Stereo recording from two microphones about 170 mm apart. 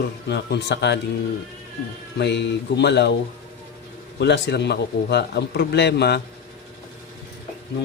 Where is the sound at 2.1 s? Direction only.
90° left.